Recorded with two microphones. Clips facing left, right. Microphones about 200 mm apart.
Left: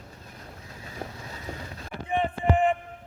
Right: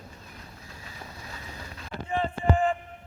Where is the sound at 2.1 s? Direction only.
20° left (ahead or behind).